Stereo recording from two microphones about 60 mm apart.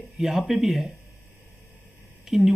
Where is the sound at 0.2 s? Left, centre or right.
Centre.